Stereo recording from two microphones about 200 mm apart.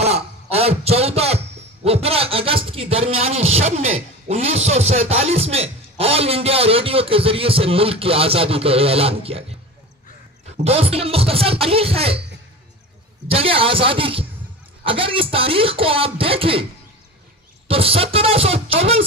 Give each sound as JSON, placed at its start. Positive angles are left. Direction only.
{"t": 0.0, "sound": "a sound", "side_deg": -30}
{"t": 1.9, "sound": "a man's voice", "side_deg": -30}
{"t": 13.3, "sound": "a man's voice", "side_deg": -30}
{"t": 17.6, "sound": "a man's voice", "side_deg": -30}